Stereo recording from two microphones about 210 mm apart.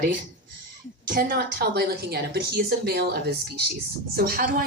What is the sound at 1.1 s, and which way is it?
Speech, 50° right (ahead or behind).